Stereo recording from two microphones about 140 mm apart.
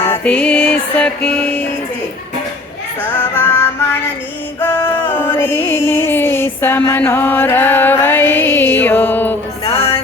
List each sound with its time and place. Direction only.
0.0 s music: 10° left (ahead or behind)
3.0 s child singing: 15° left (ahead or behind)
4.6 s music: 15° left (ahead or behind)
9.6 s music: 45° left (ahead or behind)